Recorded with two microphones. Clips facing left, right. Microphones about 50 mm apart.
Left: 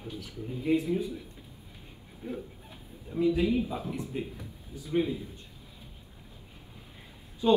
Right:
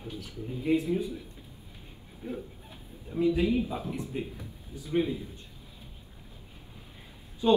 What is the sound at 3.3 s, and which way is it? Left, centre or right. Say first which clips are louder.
Speech: even; right.